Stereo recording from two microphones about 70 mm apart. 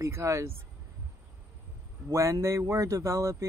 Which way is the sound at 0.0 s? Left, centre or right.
Right.